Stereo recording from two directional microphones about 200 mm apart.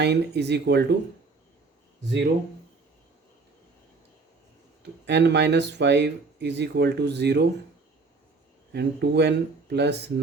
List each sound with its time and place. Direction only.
0.0 s speech: 55° right (ahead or behind)
2.0 s speech: 60° right (ahead or behind)
4.8 s speech: 60° right (ahead or behind)
8.7 s speech: 55° right (ahead or behind)